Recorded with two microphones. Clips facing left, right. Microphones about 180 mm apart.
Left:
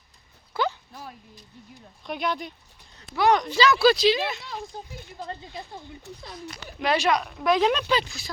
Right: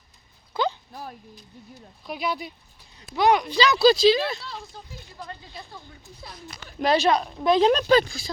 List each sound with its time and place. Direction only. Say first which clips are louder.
0.5 s a sound: right 1 dB; 20° right (ahead or behind)
2.0 s speech: even; 5° right (ahead or behind)
3.8 s speech: right 5 dB; 35° right (ahead or behind)
5.3 s speech: left 6 dB; 25° left (ahead or behind)
6.1 s speech: left 7 dB; 70° left (ahead or behind)
6.7 s speech: right 3 dB; 35° right (ahead or behind)